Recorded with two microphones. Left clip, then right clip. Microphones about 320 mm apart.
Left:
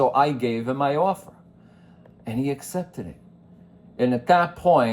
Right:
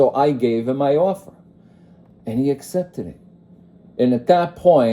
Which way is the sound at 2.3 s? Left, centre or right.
Centre.